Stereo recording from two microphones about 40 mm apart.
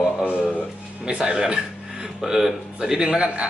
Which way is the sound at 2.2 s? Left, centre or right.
Centre.